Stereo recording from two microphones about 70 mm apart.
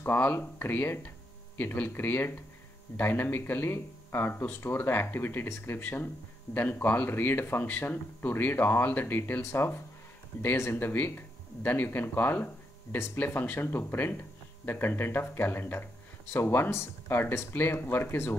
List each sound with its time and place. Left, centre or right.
0.0 s speech: left